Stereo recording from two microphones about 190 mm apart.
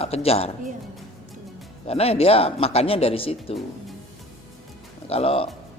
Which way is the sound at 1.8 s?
30° left (ahead or behind).